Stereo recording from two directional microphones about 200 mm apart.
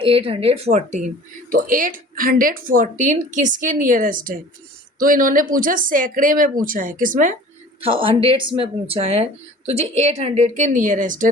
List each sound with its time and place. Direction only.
0.0 s speech: 25° right (ahead or behind)
7.8 s speech: 25° right (ahead or behind)